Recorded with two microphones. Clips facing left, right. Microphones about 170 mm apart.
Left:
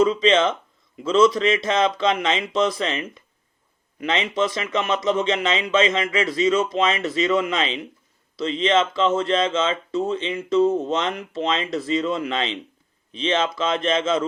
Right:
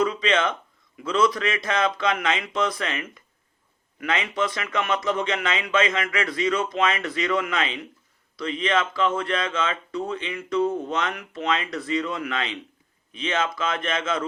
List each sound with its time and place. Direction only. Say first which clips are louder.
0.0 s speech: left 5 dB; 25° left (ahead or behind)